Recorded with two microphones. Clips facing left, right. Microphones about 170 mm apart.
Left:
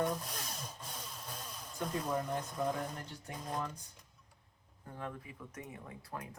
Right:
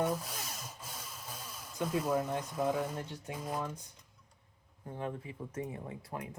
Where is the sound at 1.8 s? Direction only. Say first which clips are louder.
Right 4 dB; 5° right (ahead or behind).